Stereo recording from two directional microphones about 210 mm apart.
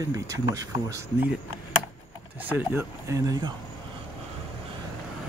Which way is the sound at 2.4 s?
10° right (ahead or behind).